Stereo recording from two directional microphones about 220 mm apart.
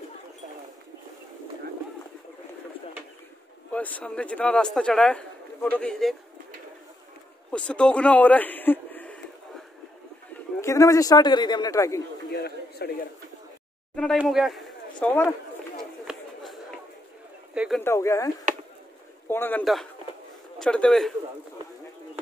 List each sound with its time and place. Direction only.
3.7 s a man's voice: 5° left (ahead or behind)
7.5 s a man's voice: 5° left (ahead or behind)
10.6 s a man's voice: 15° left (ahead or behind)
12.3 s a man's voice: 45° left (ahead or behind)
13.9 s speech: centre (ahead or behind)
17.6 s a sound: centre (ahead or behind)
17.8 s a man's voice: 15° left (ahead or behind)